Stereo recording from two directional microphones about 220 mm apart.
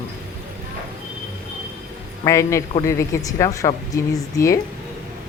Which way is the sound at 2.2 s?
15° left (ahead or behind).